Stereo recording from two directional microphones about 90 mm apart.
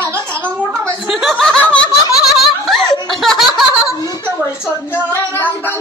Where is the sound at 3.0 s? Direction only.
Centre (ahead or behind).